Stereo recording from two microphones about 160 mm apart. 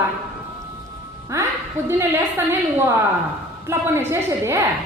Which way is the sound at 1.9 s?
15° right (ahead or behind).